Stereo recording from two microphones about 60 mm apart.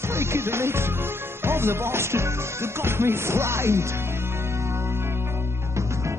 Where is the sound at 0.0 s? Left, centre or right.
Right.